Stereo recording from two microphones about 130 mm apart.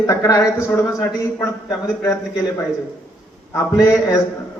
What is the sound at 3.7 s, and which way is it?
Speech, 25° left (ahead or behind).